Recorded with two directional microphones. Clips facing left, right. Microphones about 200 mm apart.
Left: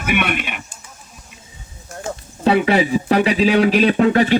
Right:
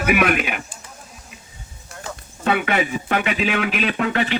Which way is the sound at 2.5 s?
30° left (ahead or behind).